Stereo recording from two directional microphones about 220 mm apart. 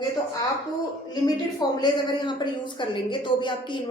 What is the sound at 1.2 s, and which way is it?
A woman's voice, 20° left (ahead or behind).